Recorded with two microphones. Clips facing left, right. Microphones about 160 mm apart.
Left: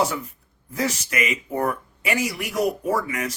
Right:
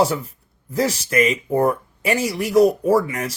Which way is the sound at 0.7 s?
35° right (ahead or behind).